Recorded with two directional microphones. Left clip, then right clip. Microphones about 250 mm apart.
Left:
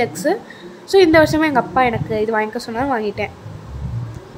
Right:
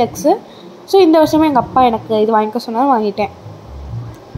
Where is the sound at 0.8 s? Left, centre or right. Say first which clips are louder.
Right 2 dB; centre.